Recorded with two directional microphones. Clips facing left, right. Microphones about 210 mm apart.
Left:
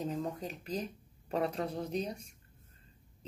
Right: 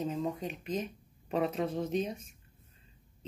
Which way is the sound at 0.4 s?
35° left (ahead or behind).